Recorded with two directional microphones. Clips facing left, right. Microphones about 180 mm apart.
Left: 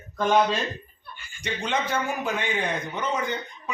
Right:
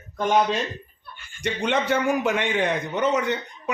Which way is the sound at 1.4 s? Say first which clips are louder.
Right 4 dB; 70° right (ahead or behind).